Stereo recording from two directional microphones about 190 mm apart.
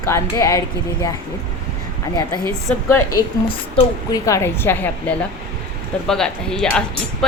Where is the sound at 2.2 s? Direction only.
15° left (ahead or behind).